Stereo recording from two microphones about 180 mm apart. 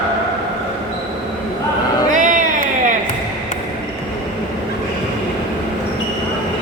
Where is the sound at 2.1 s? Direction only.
45° right (ahead or behind).